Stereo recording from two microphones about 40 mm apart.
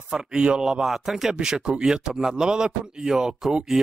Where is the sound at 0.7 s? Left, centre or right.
Centre.